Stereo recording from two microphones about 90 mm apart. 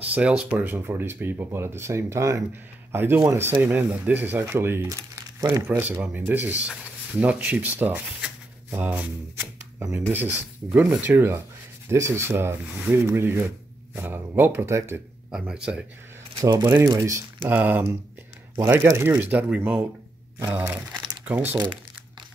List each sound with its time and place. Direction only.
0.1 s speech: 10° right (ahead or behind); by 3.5 s 30° right (ahead or behind)
3.6 s speech: 20° right (ahead or behind)
4.8 s crumpling: 40° right (ahead or behind)
5.7 s speech: 20° right (ahead or behind)
15.3 s speech: 5° right (ahead or behind)
16.8 s speech: 40° right (ahead or behind)
17.4 s speech: 20° right (ahead or behind)
18.9 s speech: 25° right (ahead or behind)